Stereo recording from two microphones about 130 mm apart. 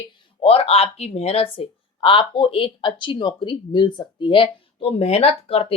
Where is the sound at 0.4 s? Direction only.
50° left (ahead or behind).